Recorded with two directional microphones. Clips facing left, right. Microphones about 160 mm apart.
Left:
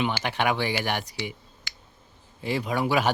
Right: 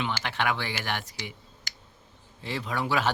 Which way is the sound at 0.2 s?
15° left (ahead or behind).